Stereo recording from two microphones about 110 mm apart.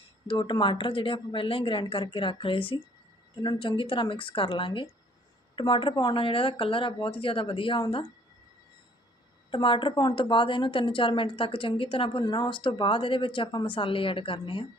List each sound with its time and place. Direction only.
0.3 s a woman's voice: 45° left (ahead or behind)
9.5 s a woman's voice: 50° left (ahead or behind)